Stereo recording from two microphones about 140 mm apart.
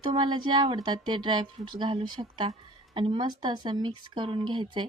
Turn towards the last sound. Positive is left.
turn(degrees=-35)  # may be behind; listen again after turning